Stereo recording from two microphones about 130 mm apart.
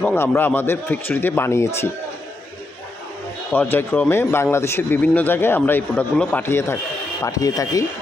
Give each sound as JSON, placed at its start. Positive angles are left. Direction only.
{"t": 0.0, "sound": "speech", "side_deg": 15}
{"t": 3.5, "sound": "speech", "side_deg": 15}